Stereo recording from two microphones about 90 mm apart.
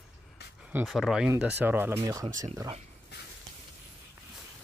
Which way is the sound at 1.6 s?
20° right (ahead or behind).